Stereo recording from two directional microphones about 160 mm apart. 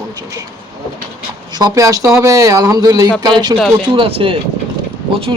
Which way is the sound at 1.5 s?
20° right (ahead or behind).